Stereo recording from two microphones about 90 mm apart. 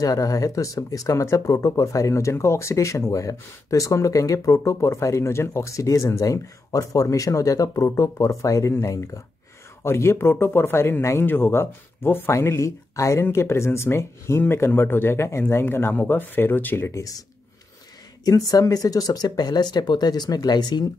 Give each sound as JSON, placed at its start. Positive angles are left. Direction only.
{"t": 0.0, "sound": "speech", "side_deg": 40}
{"t": 18.2, "sound": "speech", "side_deg": 40}